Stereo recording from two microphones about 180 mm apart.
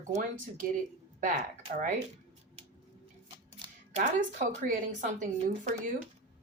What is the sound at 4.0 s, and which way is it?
Speech, 45° right (ahead or behind).